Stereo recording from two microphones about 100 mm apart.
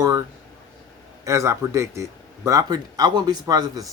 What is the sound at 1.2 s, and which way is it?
A man's voice, 30° right (ahead or behind).